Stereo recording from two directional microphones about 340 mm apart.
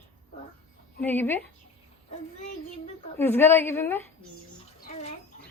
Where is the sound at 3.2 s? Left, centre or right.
Centre.